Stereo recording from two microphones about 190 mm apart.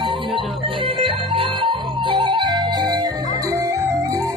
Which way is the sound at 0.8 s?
25° right (ahead or behind).